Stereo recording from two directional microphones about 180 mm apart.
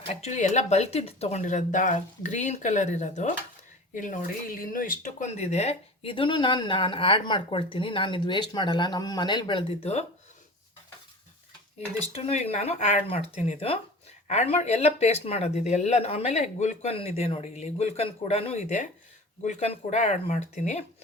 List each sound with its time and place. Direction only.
0.0 s speech: 35° left (ahead or behind)
12.1 s speech: 35° left (ahead or behind)